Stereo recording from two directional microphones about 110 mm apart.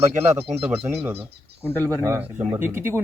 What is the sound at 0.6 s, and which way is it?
Speech, 60° right (ahead or behind).